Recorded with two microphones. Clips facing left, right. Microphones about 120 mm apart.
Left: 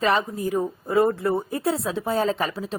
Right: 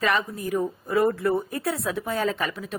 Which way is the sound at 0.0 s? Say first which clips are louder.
Left 3 dB; 30° left (ahead or behind).